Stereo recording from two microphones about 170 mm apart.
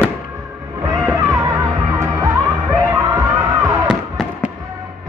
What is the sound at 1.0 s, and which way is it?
Music, 20° right (ahead or behind).